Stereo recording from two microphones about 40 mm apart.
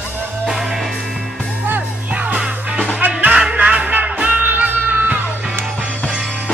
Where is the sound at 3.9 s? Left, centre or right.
Right.